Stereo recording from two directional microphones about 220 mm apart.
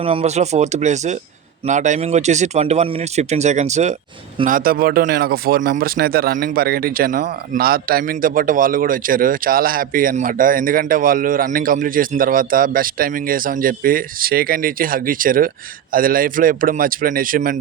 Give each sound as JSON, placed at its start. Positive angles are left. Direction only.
{"t": 0.0, "sound": "speech", "side_deg": -25}